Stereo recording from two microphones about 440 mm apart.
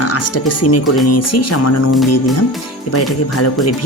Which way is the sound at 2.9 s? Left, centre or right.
Left.